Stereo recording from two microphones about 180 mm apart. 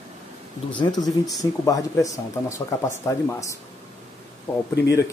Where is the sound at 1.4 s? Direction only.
20° left (ahead or behind).